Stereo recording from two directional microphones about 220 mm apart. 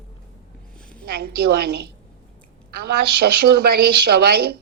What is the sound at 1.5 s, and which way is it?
Speech, 45° right (ahead or behind).